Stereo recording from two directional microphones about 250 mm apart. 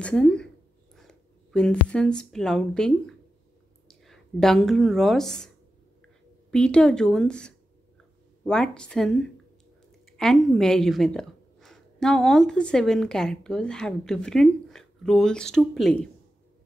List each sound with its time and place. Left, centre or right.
0.0 s a woman's voice: centre
6.5 s speech: centre